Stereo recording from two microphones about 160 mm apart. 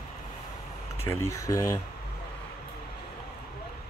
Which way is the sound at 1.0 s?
15° left (ahead or behind).